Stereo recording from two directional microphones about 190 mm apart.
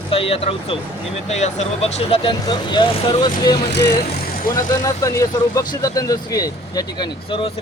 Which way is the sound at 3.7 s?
60° left (ahead or behind).